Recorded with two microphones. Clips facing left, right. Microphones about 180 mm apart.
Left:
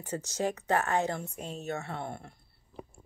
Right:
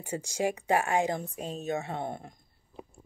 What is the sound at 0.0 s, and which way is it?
Speech, 10° right (ahead or behind).